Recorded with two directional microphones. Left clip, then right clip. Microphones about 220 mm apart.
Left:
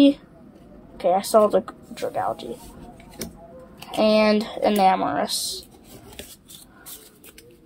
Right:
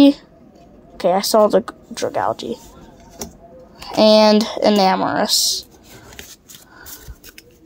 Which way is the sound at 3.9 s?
35° right (ahead or behind).